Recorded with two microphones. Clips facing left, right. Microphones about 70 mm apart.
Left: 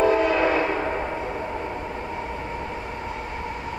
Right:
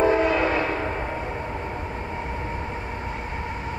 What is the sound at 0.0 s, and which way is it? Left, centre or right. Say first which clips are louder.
Train: even; right.